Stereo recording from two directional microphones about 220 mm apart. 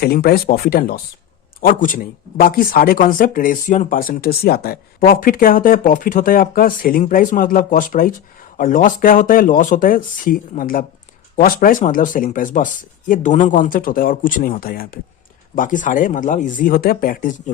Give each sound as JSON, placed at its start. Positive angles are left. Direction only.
{"t": 0.0, "sound": "speech", "side_deg": 45}